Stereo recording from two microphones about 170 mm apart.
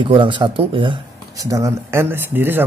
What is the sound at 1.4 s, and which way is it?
Speech, 20° right (ahead or behind).